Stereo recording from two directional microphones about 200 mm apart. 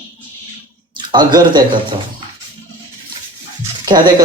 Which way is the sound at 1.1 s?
20° right (ahead or behind).